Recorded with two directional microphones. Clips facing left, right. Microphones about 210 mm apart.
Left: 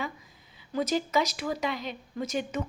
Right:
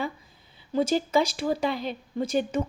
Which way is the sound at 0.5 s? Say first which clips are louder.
Right 4 dB; 30° right (ahead or behind).